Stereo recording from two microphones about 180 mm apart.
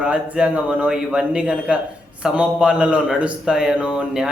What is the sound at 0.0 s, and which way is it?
A man's voice, 5° right (ahead or behind).